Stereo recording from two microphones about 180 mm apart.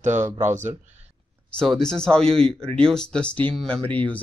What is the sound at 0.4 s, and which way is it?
Speech, 40° right (ahead or behind).